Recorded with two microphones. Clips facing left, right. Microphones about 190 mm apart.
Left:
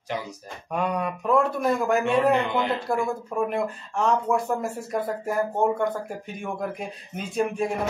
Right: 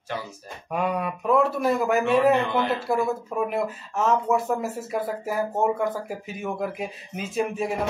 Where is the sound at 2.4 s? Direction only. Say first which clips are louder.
Right 1 dB; 20° left (ahead or behind).